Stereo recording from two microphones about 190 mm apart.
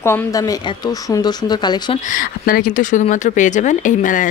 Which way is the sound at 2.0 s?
45° left (ahead or behind).